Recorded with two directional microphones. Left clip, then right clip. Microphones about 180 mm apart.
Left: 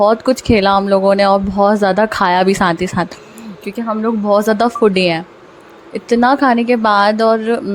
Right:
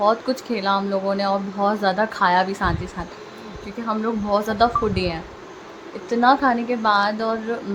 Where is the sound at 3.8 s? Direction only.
40° left (ahead or behind).